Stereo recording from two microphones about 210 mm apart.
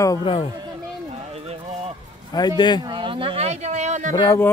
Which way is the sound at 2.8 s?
25° right (ahead or behind).